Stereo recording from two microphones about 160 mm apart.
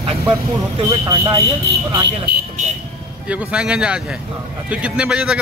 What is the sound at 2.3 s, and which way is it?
Vehicle, 90° right.